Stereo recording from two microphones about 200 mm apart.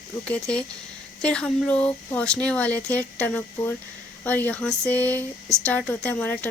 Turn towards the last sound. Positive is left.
turn(degrees=5)  # may be behind; listen again after turning